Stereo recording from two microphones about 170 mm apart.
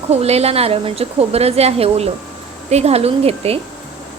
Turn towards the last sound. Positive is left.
turn(degrees=-35)  # may be behind; listen again after turning